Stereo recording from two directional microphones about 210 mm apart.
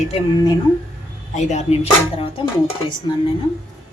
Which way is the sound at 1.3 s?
35° left (ahead or behind).